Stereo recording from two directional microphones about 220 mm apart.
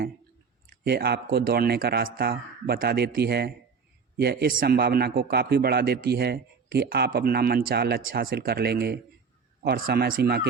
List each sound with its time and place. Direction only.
0.9 s a man's voice: 45° right (ahead or behind)